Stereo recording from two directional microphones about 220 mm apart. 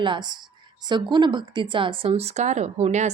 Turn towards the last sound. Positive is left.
turn(degrees=-30)  # may be behind; listen again after turning